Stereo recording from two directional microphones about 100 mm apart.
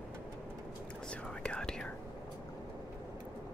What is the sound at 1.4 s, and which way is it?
Whispering, 10° left (ahead or behind).